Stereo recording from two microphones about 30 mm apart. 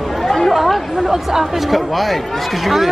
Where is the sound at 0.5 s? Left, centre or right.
Centre.